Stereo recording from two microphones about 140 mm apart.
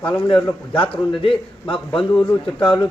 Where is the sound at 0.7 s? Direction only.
40° left (ahead or behind).